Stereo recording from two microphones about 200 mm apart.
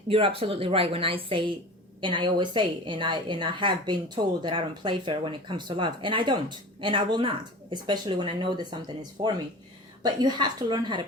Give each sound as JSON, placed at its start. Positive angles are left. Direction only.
{"t": 0.1, "sound": "a woman's voice", "side_deg": -25}